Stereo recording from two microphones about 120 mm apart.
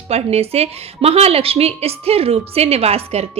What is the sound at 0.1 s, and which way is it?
A woman's voice, 60° right (ahead or behind).